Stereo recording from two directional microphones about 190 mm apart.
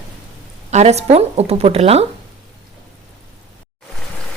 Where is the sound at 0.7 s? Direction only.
35° right (ahead or behind).